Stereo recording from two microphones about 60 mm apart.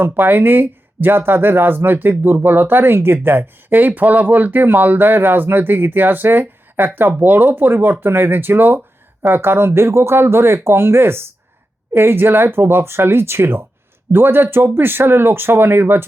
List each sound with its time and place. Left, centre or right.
0.0 s speech: right